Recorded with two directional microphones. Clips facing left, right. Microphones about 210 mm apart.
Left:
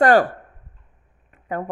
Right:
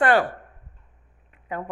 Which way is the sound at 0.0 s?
40° left (ahead or behind).